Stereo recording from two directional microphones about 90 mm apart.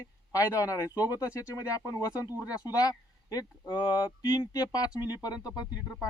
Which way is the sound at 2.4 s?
45° left (ahead or behind).